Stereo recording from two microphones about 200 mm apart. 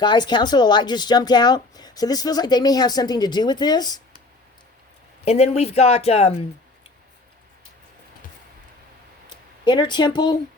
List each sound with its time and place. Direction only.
0.0 s speech: 20° left (ahead or behind)
5.2 s speech: 30° left (ahead or behind)
9.3 s speech: 20° left (ahead or behind)